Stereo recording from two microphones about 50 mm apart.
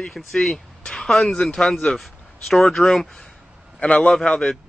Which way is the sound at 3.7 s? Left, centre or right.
Left.